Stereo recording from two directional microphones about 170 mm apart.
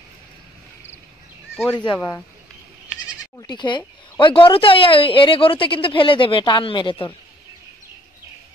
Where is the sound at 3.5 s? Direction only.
25° left (ahead or behind).